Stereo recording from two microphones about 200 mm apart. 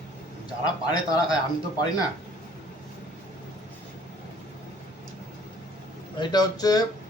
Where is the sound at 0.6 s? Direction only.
20° left (ahead or behind).